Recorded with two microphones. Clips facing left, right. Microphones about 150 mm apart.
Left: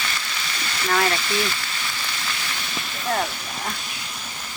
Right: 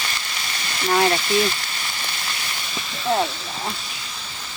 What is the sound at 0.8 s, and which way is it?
Speech, 25° right (ahead or behind).